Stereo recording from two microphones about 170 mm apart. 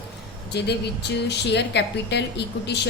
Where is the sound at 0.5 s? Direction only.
75° left (ahead or behind).